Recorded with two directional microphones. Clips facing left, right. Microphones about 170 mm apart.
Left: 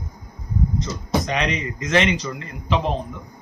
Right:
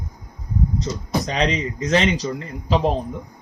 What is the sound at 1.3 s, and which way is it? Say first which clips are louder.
A man's voice: right 2 dB; 30° right (ahead or behind).